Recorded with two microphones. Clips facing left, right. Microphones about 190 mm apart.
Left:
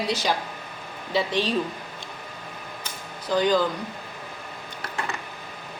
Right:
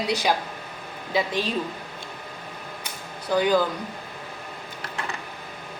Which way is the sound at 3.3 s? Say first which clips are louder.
Right 1 dB; 10° right (ahead or behind).